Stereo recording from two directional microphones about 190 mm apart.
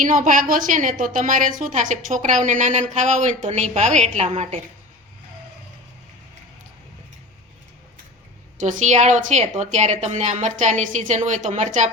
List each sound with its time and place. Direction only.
0.0 s a woman's voice: 45° right (ahead or behind)
8.5 s a woman's voice: 40° right (ahead or behind)